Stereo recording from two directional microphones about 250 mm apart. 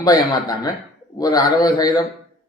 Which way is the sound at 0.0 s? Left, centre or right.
Centre.